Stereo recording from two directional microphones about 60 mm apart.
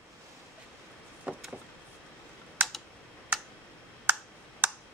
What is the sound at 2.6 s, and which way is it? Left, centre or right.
Computer keyboard, right.